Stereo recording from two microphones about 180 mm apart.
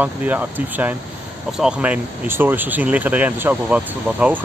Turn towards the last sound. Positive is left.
turn(degrees=-5)  # may be behind; listen again after turning